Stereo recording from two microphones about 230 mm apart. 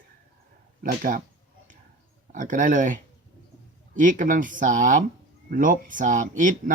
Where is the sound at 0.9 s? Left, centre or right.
Right.